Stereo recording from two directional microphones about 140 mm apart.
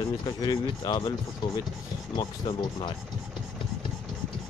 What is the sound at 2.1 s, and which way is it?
Speech, 35° left (ahead or behind).